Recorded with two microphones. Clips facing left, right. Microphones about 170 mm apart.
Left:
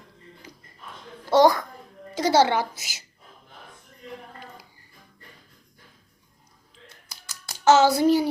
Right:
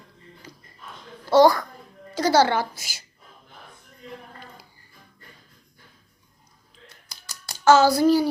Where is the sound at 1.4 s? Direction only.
20° left (ahead or behind).